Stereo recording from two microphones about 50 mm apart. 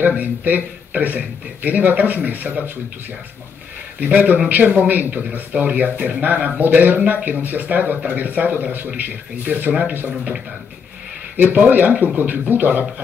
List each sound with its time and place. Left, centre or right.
0.0 s speech: right
4.0 s speech: right
11.3 s speech: right